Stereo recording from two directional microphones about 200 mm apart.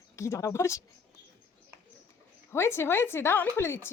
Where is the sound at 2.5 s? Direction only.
10° left (ahead or behind).